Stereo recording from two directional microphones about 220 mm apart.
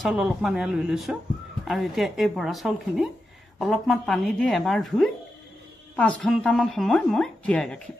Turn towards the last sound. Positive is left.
turn(degrees=5)  # may be behind; listen again after turning